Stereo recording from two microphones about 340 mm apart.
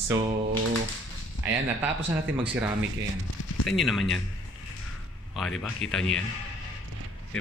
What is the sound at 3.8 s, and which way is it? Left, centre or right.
Speech, centre.